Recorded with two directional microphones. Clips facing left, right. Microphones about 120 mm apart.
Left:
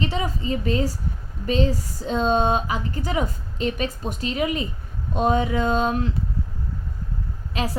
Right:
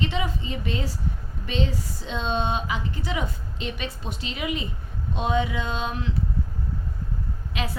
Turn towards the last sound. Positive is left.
turn(degrees=35)  # may be behind; listen again after turning